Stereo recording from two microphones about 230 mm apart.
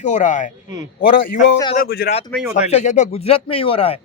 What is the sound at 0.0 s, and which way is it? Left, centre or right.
Speech, left.